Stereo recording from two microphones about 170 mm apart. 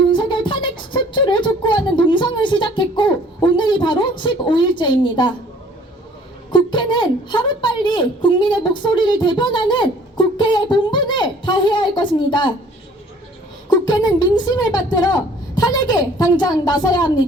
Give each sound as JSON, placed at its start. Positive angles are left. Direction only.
{"t": 0.1, "sound": "a sound", "side_deg": 30}
{"t": 6.5, "sound": "a woman's voice", "side_deg": 25}
{"t": 13.7, "sound": "a woman's voice", "side_deg": 25}